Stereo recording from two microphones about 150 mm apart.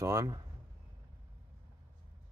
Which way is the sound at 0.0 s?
20° right (ahead or behind).